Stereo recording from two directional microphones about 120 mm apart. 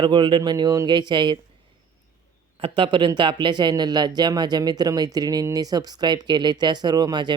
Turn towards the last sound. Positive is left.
turn(degrees=-40)  # may be behind; listen again after turning